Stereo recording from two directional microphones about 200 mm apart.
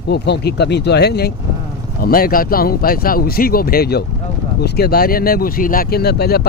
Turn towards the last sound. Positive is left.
turn(degrees=50)  # may be behind; listen again after turning